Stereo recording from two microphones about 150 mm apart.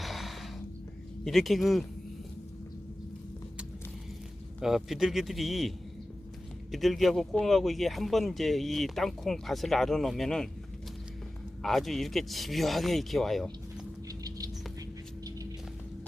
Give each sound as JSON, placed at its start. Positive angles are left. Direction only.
{"t": 0.0, "sound": "music", "side_deg": 0}
{"t": 1.2, "sound": "speech", "side_deg": 0}
{"t": 4.6, "sound": "speech", "side_deg": 0}
{"t": 11.6, "sound": "speech", "side_deg": 0}
{"t": 14.1, "sound": "patter", "side_deg": -25}